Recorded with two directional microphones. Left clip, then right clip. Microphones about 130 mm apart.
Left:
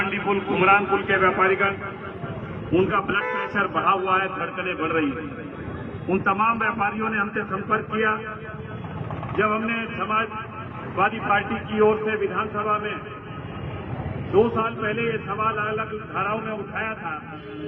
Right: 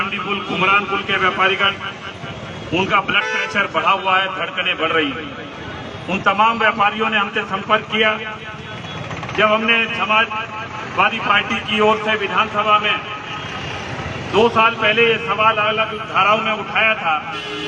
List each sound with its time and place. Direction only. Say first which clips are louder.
0.0 s a man's voice: right 3 dB; 25° right (ahead or behind)
2.7 s a man's voice: right 5 dB; 25° right (ahead or behind)
6.4 s a man's voice: right 7 dB; 20° right (ahead or behind)
9.4 s a man's voice: right 9 dB; 20° right (ahead or behind)
14.3 s a man's voice: right 7 dB; 20° right (ahead or behind)